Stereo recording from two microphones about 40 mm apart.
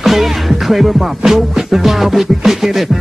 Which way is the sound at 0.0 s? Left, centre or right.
Centre.